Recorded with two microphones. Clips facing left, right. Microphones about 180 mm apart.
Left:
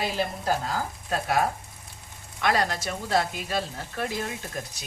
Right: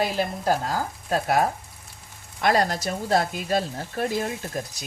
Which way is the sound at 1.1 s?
40° right (ahead or behind).